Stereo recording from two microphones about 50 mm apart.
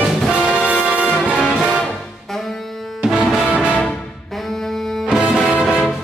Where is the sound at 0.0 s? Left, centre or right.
Centre.